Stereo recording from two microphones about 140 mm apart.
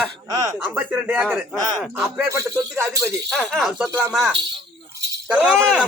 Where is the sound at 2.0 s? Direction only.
20° right (ahead or behind).